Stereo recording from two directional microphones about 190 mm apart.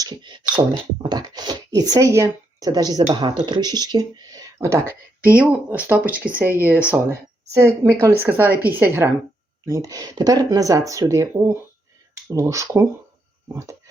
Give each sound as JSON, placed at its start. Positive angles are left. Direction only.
{"t": 0.0, "sound": "beatboxing", "side_deg": -25}
{"t": 1.0, "sound": "speech", "side_deg": -20}